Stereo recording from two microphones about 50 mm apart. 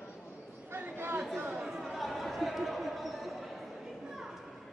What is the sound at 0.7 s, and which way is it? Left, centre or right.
Chatter, right.